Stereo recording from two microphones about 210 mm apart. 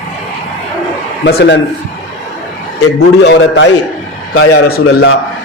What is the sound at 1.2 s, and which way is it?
Speech, 55° left (ahead or behind).